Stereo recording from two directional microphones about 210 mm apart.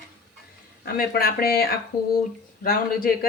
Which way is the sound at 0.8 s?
45° left (ahead or behind).